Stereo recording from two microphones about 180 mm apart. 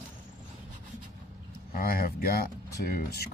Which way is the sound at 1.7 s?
55° left (ahead or behind).